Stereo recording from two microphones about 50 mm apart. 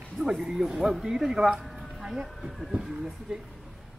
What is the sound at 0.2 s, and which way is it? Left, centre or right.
Speech, centre.